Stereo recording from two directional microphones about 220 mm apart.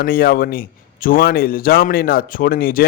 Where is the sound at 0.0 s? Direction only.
40° left (ahead or behind).